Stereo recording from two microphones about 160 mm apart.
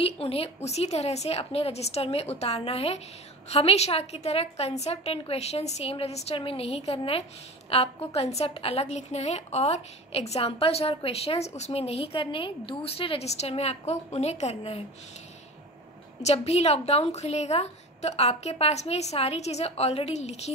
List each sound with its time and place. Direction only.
0.0 s a woman's voice: 40° left (ahead or behind)
16.2 s a woman's voice: 40° left (ahead or behind)